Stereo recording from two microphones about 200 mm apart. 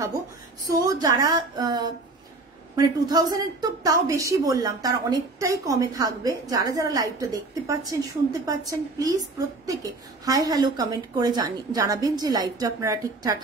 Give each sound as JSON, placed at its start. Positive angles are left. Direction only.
{"t": 0.7, "sound": "a woman's voice", "side_deg": -20}
{"t": 10.2, "sound": "a woman's voice", "side_deg": -20}